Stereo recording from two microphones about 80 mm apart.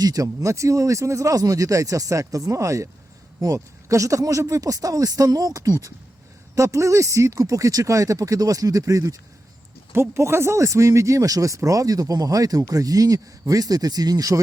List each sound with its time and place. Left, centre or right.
0.0 s speech: right
9.9 s speech: right